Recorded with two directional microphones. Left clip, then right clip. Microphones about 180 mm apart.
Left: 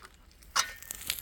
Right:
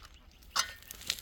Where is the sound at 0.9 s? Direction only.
50° left (ahead or behind).